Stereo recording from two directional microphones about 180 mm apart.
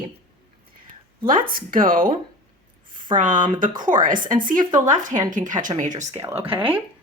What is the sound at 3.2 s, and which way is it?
Speech, 45° right (ahead or behind).